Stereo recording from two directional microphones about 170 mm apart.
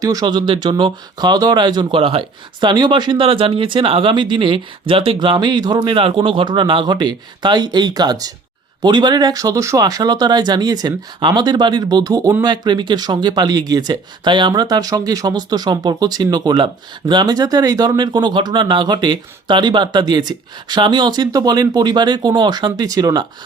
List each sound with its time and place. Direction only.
0.0 s speech: 20° right (ahead or behind)